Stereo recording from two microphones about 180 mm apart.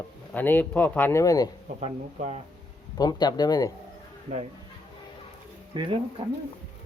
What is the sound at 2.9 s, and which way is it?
Speech, 20° left (ahead or behind).